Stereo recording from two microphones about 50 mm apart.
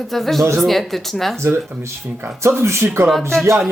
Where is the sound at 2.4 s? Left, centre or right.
Right.